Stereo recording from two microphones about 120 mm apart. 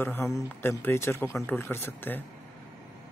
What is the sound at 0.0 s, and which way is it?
Speech, 20° left (ahead or behind).